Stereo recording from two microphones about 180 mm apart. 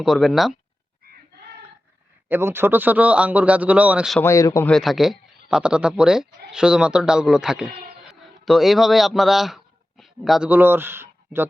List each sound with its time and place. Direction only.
0.0 s a man's voice: centre (ahead or behind)
2.3 s a man's voice: 10° right (ahead or behind)
4.2 s speech: 15° left (ahead or behind)
4.7 s a man's voice: centre (ahead or behind)